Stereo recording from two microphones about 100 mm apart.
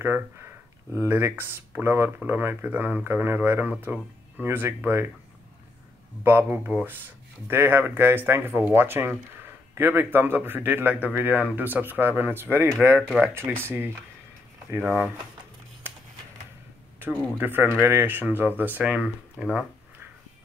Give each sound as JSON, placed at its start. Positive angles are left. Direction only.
{"t": 0.0, "sound": "speech", "side_deg": -25}
{"t": 6.2, "sound": "speech", "side_deg": -20}
{"t": 14.8, "sound": "speech", "side_deg": 5}
{"t": 17.4, "sound": "speech", "side_deg": -20}